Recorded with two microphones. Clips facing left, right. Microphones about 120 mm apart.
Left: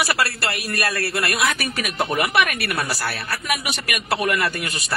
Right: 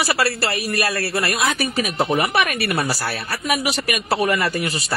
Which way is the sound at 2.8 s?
35° right (ahead or behind).